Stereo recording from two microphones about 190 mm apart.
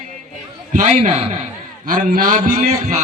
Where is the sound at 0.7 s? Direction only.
35° right (ahead or behind).